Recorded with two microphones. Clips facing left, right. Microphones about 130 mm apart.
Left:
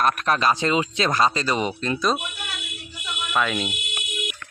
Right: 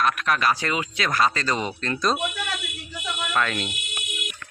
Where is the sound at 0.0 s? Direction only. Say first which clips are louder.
Left 2 dB; 40° left (ahead or behind).